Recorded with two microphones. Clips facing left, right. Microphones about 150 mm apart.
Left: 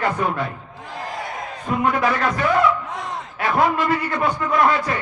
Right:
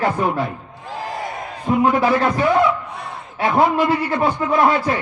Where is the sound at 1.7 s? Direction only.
30° right (ahead or behind).